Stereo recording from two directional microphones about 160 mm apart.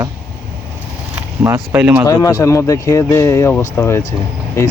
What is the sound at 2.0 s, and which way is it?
Speech, 20° left (ahead or behind).